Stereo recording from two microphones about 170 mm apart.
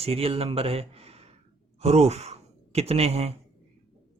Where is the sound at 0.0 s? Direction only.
35° right (ahead or behind).